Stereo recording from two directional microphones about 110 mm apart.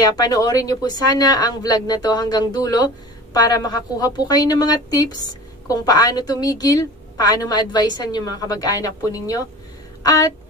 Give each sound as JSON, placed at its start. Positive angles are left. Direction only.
{"t": 0.0, "sound": "a woman's voice", "side_deg": 35}